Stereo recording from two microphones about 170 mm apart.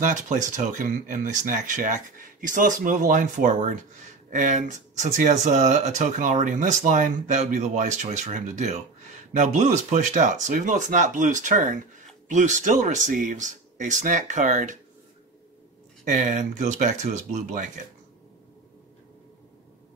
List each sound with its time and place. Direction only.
0.0 s speech: 45° right (ahead or behind)
16.0 s speech: 50° right (ahead or behind)